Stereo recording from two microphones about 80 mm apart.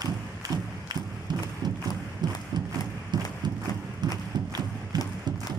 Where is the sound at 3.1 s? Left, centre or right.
Right.